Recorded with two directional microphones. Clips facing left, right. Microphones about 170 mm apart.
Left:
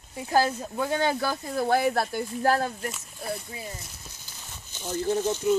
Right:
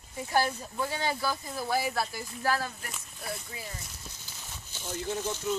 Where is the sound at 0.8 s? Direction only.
60° left (ahead or behind).